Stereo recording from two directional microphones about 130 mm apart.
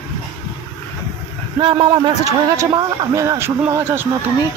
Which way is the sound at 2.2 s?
25° right (ahead or behind).